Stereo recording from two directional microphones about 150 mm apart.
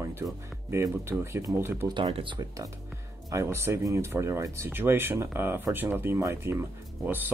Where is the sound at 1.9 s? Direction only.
30° right (ahead or behind).